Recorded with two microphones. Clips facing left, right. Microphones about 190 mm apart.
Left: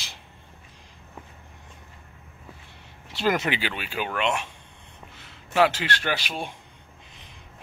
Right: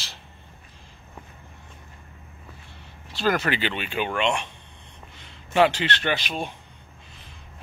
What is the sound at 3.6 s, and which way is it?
A man's voice, 5° left (ahead or behind).